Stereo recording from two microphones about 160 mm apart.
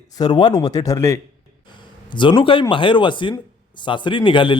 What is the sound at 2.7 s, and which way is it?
Speech, 30° left (ahead or behind).